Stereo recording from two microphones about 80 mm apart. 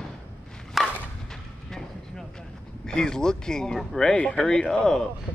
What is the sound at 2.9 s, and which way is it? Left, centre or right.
Speech, centre.